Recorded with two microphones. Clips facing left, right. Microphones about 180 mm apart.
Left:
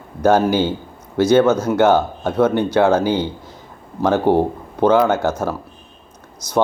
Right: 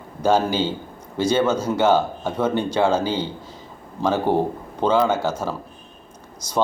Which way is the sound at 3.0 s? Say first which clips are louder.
Left 5 dB; 10° left (ahead or behind).